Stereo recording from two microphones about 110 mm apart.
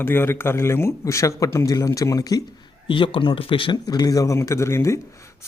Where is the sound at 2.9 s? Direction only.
50° left (ahead or behind).